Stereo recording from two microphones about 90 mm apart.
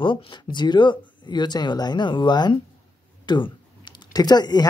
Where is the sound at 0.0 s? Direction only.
70° left (ahead or behind).